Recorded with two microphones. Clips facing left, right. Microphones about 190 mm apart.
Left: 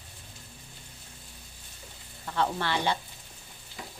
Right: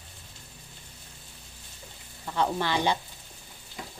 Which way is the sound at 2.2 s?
15° right (ahead or behind).